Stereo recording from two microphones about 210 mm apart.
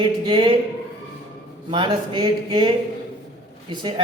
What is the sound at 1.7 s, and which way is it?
Speech, 25° right (ahead or behind).